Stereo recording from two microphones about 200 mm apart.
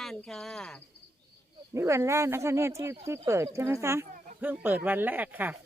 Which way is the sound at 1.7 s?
15° right (ahead or behind).